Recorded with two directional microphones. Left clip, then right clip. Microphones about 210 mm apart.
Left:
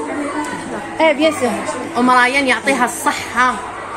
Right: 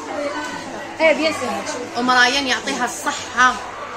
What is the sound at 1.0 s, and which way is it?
A woman's voice, 25° left (ahead or behind).